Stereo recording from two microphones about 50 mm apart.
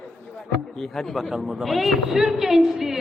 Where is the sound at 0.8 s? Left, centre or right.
Centre.